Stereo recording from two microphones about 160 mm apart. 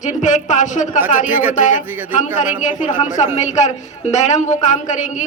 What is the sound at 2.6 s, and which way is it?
A man's voice, 50° left (ahead or behind).